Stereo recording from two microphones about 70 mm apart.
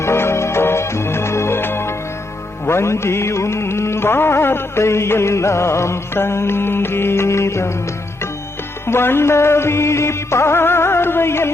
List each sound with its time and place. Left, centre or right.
0.0 s music: left
8.9 s music: left